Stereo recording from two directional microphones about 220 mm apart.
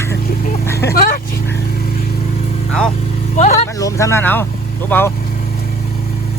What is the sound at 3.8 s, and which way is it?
Speech, 15° left (ahead or behind).